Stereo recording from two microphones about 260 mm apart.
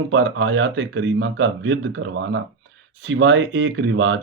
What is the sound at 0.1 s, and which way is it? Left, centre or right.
A man's voice, right.